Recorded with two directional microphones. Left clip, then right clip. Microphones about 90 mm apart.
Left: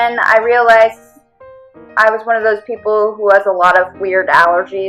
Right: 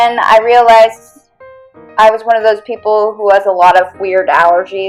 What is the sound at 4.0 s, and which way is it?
Speech, 40° right (ahead or behind).